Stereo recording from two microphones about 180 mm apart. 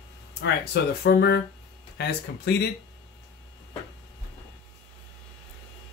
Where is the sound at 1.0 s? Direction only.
65° left (ahead or behind).